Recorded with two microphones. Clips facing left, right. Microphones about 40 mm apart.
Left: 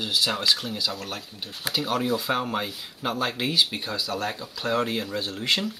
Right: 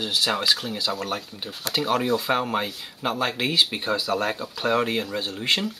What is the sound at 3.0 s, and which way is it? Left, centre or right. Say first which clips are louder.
Speech: right 2 dB; centre.